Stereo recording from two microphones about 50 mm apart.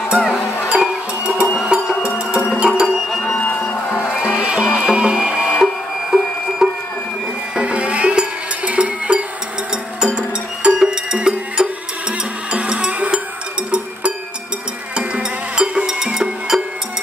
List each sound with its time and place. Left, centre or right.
0.1 s music: centre
0.7 s music: centre
2.6 s a sound: centre
3.1 s a sound: centre
4.2 s music: right
5.5 s music: centre
7.5 s music: right
15.0 s music: centre